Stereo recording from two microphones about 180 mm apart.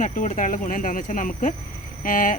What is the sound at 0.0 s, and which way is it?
Speech, 45° left (ahead or behind).